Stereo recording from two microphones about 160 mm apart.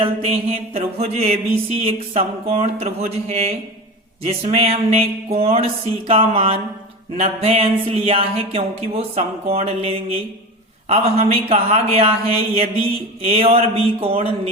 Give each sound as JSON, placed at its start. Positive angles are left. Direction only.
{"t": 0.0, "sound": "music", "side_deg": -35}